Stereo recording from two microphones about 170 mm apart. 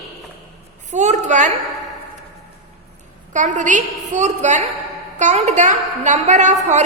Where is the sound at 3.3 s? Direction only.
45° right (ahead or behind).